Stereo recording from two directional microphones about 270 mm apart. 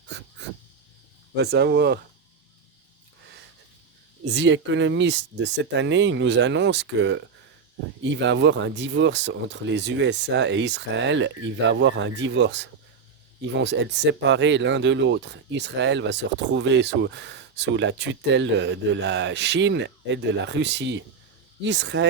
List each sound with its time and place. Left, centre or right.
0.1 s a sound: right
1.4 s speech: right
4.3 s speech: right